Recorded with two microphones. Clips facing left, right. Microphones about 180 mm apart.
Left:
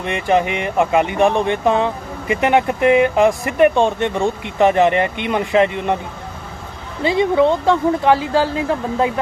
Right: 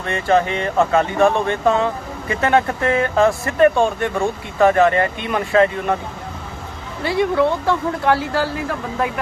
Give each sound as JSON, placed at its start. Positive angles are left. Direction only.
{"t": 0.0, "sound": "speech", "side_deg": 15}
{"t": 7.0, "sound": "speech", "side_deg": 20}